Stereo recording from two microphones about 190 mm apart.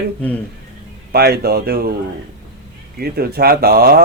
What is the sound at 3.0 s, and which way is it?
Speech, 55° right (ahead or behind).